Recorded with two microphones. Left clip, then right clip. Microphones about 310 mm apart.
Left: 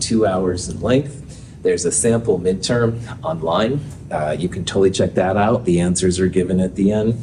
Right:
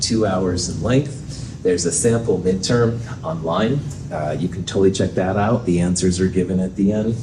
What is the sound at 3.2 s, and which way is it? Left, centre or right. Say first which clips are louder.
Speech: left 3 dB; left.